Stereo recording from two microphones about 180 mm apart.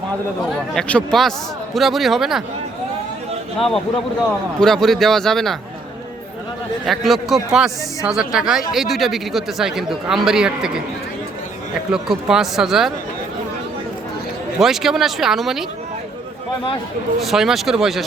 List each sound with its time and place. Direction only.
0.7 s speech: 5° left (ahead or behind)
4.6 s speech: centre (ahead or behind)
6.8 s speech: centre (ahead or behind)
11.9 s speech: 5° right (ahead or behind)
14.6 s speech: centre (ahead or behind)
17.2 s speech: centre (ahead or behind)